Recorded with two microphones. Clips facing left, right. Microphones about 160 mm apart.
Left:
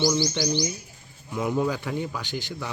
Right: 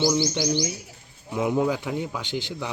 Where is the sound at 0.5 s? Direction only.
75° right (ahead or behind).